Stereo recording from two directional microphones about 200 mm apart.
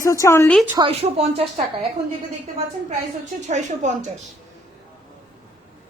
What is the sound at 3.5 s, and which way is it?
Speech, 35° right (ahead or behind).